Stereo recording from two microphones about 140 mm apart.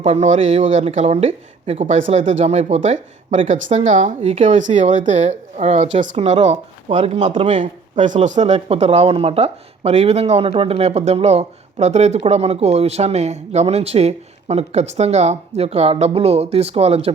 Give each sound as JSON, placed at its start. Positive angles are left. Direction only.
{"t": 0.0, "sound": "speech", "side_deg": -55}
{"t": 1.9, "sound": "speech", "side_deg": -60}
{"t": 7.4, "sound": "speech", "side_deg": -60}